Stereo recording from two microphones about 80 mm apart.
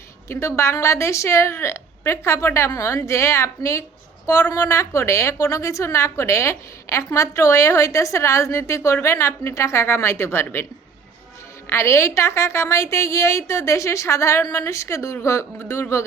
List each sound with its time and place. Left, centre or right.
0.3 s a woman's voice: left
11.7 s a woman's voice: left